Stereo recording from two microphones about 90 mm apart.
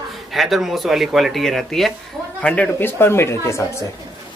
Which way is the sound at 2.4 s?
15° left (ahead or behind).